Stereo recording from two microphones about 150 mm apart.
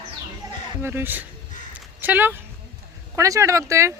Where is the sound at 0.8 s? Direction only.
15° right (ahead or behind).